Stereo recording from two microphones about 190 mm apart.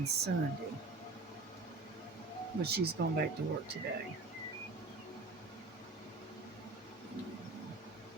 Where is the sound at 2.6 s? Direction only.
55° right (ahead or behind).